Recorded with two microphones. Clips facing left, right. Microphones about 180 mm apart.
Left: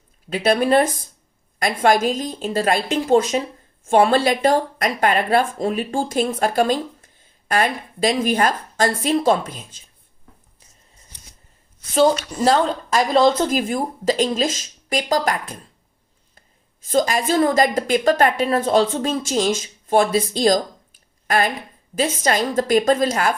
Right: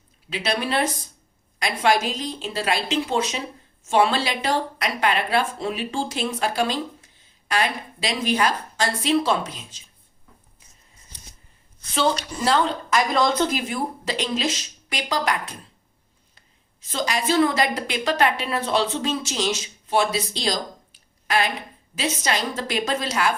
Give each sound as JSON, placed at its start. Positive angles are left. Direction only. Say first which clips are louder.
{"t": 0.3, "sound": "speech", "louder": "left 8 dB", "side_deg": 50}
{"t": 11.9, "sound": "speech", "louder": "left 6 dB", "side_deg": 40}
{"t": 16.8, "sound": "speech", "louder": "left 6 dB", "side_deg": 45}